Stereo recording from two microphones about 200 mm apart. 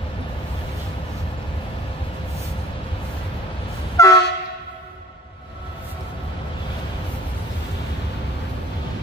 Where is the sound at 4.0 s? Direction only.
15° left (ahead or behind).